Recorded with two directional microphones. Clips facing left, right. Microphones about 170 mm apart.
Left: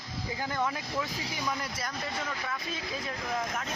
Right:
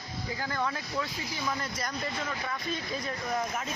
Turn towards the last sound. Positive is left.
turn(degrees=0)  # may be behind; listen again after turning